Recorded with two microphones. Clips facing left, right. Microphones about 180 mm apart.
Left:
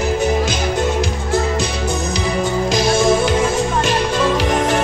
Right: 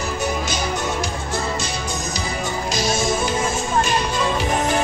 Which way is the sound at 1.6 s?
60° left (ahead or behind).